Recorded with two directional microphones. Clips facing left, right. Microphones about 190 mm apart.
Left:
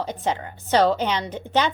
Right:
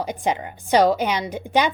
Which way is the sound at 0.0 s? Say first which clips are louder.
Right 2 dB; 10° right (ahead or behind).